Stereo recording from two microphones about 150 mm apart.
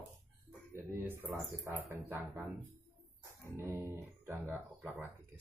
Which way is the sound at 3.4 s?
20° right (ahead or behind).